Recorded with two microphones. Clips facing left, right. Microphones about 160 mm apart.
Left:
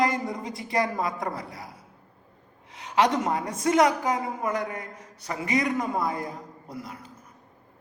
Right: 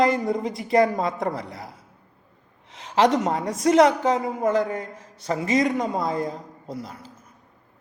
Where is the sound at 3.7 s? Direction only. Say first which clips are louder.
Right 5 dB; 25° right (ahead or behind).